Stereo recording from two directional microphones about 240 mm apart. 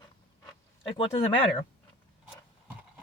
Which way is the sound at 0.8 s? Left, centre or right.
Left.